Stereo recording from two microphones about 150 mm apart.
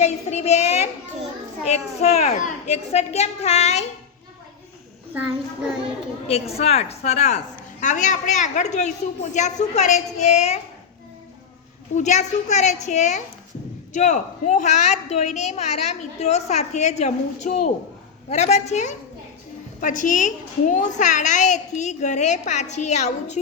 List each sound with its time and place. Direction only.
0.0 s a woman's voice: 45° left (ahead or behind)
6.2 s a woman's voice: 40° left (ahead or behind)
11.9 s a woman's voice: 50° left (ahead or behind)